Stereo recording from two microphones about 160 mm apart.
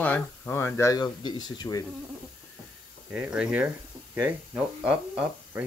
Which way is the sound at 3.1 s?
10° right (ahead or behind).